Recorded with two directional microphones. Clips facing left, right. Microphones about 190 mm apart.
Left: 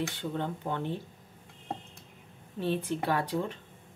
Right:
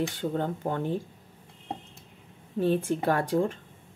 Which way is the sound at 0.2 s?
45° right (ahead or behind).